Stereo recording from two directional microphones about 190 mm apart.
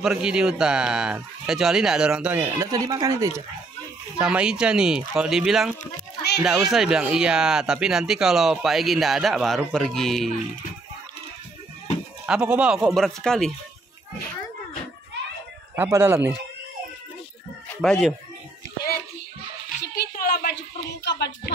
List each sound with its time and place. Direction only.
0.0 s speech: 5° right (ahead or behind)
4.2 s speech: 5° right (ahead or behind)
12.3 s speech: 5° right (ahead or behind)
15.7 s speech: 10° right (ahead or behind)
17.8 s speech: centre (ahead or behind)
19.8 s a sound: 60° left (ahead or behind)